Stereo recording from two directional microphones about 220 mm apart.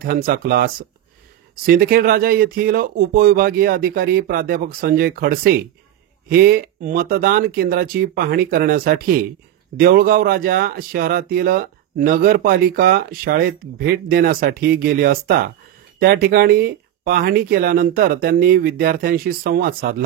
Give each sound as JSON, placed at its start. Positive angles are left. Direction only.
{"t": 0.0, "sound": "speech", "side_deg": -40}
{"t": 1.7, "sound": "speech", "side_deg": -40}